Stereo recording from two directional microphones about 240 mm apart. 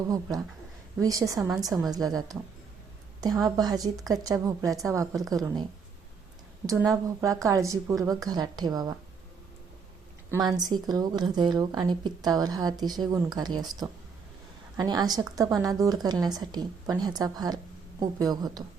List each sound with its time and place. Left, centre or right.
0.1 s a woman's voice: centre
3.4 s a woman's voice: centre
6.7 s a woman's voice: centre
10.6 s a woman's voice: centre